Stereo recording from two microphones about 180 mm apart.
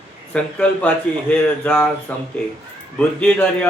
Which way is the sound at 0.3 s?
5° left (ahead or behind).